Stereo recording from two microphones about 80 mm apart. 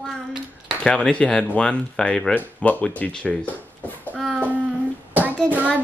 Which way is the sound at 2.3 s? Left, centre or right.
Centre.